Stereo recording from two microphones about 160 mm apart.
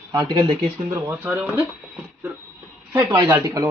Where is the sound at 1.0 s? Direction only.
10° right (ahead or behind).